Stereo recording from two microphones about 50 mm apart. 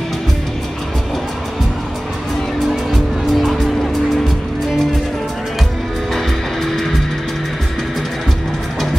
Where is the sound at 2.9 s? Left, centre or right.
Centre.